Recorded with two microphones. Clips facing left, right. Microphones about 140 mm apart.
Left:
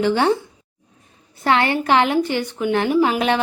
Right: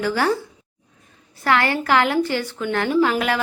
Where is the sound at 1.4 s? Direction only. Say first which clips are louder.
Left 2 dB; 25° left (ahead or behind).